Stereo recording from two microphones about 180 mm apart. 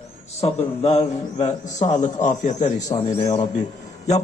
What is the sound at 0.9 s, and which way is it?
A man's voice, 40° left (ahead or behind).